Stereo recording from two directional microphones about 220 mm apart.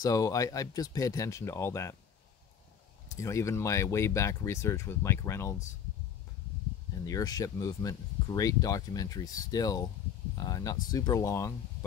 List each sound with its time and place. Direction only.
0.0 s speech: 15° left (ahead or behind)
3.1 s speech: 15° left (ahead or behind)
7.1 s speech: 15° left (ahead or behind)